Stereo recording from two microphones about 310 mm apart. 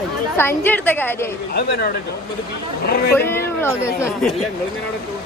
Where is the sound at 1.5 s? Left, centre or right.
Left.